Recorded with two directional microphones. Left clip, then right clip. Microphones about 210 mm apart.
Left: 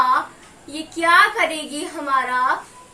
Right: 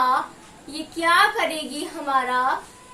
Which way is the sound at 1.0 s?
10° left (ahead or behind).